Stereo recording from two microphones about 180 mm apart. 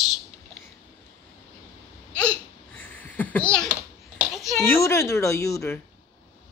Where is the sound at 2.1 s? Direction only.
5° left (ahead or behind).